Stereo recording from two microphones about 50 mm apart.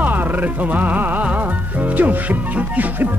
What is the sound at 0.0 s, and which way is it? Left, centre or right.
Music, right.